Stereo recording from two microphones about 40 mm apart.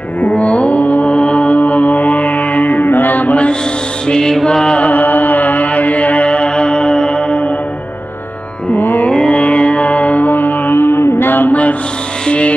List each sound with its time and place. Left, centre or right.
0.2 s mantra: left
4.1 s mantra: centre
4.8 s mantra: left
8.7 s music: left
9.1 s music: left
12.3 s music: left